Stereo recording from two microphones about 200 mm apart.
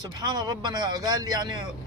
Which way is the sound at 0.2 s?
20° right (ahead or behind).